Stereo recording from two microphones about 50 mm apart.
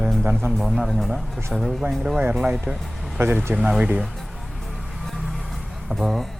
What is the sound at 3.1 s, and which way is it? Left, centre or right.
Speech, right.